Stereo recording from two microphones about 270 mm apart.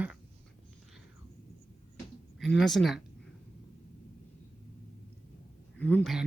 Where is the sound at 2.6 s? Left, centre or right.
Centre.